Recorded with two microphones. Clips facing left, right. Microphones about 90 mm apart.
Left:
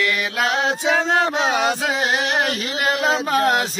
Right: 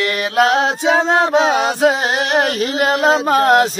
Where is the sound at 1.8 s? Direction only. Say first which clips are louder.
Right 6 dB; 45° right (ahead or behind).